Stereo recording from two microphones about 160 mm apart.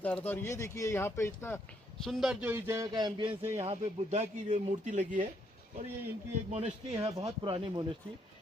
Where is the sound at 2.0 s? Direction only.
Centre (ahead or behind); by 3.3 s 25° right (ahead or behind).